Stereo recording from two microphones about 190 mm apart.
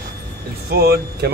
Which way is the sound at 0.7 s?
55° right (ahead or behind).